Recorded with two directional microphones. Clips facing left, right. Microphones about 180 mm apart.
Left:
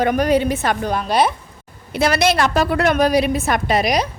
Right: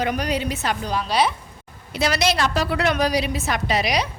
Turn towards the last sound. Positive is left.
turn(degrees=45)  # may be behind; listen again after turning